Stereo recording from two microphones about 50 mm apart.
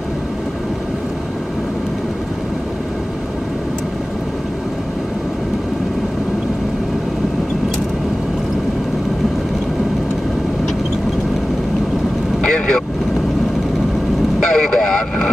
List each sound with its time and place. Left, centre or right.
12.4 s vehicle: centre
14.4 s vehicle: centre